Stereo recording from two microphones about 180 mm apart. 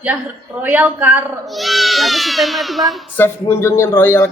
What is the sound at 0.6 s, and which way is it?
Speech, 10° right (ahead or behind).